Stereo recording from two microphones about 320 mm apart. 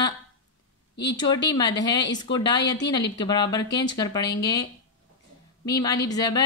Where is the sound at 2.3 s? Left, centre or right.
Left.